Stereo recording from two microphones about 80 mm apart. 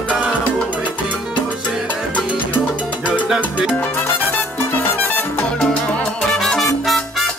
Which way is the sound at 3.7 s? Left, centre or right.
Left.